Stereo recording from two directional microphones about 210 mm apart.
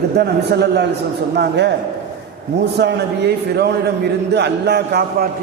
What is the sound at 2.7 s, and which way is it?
A man's voice, 55° right (ahead or behind).